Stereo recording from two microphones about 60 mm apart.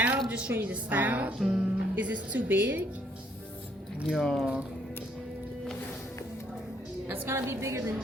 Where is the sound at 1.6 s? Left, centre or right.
Right.